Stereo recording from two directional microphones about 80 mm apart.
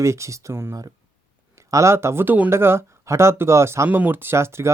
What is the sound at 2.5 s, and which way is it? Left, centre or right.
Speech, right.